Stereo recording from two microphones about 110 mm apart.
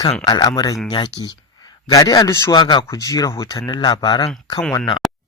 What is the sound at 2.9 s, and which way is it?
Speech, 30° left (ahead or behind).